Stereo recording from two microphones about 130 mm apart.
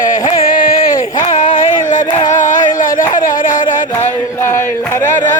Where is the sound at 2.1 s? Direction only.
75° left (ahead or behind).